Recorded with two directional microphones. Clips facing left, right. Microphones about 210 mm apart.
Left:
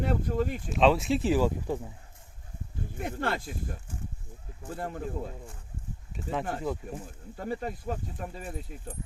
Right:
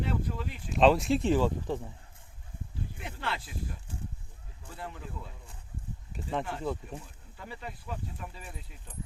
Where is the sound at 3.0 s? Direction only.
45° left (ahead or behind).